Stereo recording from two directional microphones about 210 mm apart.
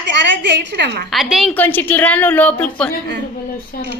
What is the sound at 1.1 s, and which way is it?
A woman's voice, centre (ahead or behind).